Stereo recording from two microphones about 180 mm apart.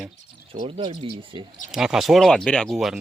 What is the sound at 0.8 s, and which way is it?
Speech, 25° right (ahead or behind).